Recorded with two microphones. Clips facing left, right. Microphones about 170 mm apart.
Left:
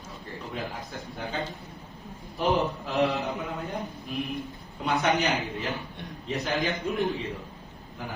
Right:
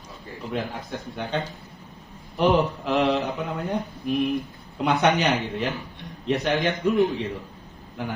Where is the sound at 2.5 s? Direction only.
80° right.